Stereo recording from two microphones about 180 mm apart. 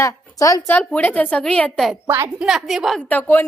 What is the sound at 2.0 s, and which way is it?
Speech, 15° right (ahead or behind).